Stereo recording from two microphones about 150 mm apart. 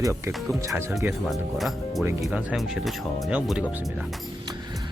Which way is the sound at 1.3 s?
Centre (ahead or behind).